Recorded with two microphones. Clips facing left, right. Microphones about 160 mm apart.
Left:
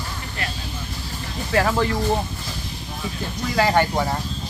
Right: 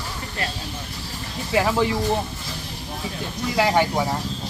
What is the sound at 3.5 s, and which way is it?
Speech, 10° right (ahead or behind).